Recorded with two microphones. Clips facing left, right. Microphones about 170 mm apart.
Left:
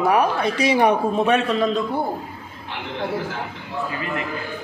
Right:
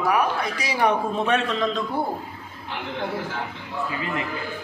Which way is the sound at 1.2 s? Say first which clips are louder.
Left 4 dB; 5° left (ahead or behind).